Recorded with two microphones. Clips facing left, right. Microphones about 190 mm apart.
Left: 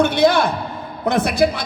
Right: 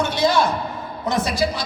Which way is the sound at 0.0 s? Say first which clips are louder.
Left 4 dB; 60° left (ahead or behind).